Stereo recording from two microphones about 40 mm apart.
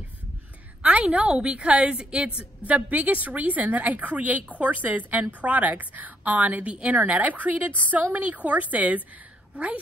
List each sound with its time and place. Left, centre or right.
0.8 s a woman's voice: right